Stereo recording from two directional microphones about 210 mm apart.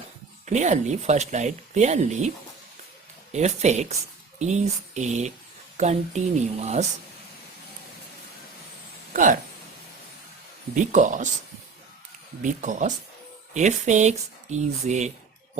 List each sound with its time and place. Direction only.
0.4 s speech: 35° right (ahead or behind)
3.3 s speech: 35° right (ahead or behind)
9.1 s speech: 40° right (ahead or behind)
10.8 s speech: 35° right (ahead or behind)
12.4 s speech: 35° right (ahead or behind)